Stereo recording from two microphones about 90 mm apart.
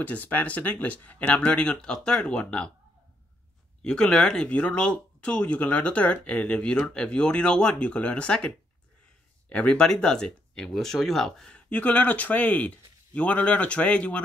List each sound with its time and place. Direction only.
0.0 s speech: 15° left (ahead or behind)
3.8 s speech: 10° left (ahead or behind)